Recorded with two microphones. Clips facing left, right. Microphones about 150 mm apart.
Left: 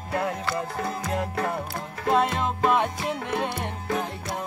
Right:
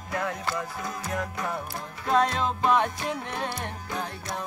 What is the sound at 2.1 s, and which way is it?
Music, 5° left (ahead or behind).